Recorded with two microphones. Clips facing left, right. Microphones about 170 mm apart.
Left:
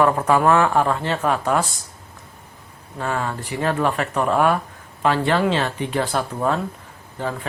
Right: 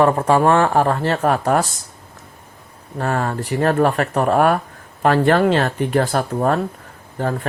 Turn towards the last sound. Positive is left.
turn(degrees=-50)  # may be behind; listen again after turning